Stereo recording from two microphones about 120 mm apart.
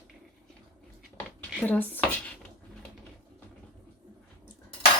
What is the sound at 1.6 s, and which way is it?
Speech, 15° left (ahead or behind).